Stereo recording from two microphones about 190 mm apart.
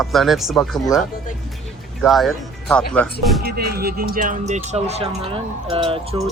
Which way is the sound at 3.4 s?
55° right (ahead or behind).